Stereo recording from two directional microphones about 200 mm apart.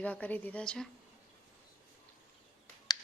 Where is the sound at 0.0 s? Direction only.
5° left (ahead or behind).